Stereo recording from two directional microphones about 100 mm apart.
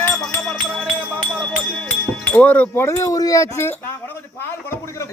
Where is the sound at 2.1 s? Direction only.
15° left (ahead or behind); by 3.7 s 30° left (ahead or behind).